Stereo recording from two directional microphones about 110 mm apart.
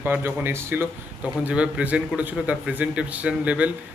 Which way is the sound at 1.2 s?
10° right (ahead or behind).